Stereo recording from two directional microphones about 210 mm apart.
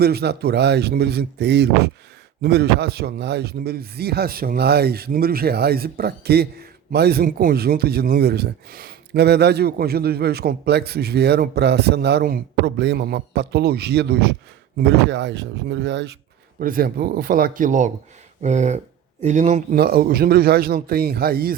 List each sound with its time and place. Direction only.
0.0 s a man's voice: 50° right (ahead or behind)
16.6 s a man's voice: 45° right (ahead or behind)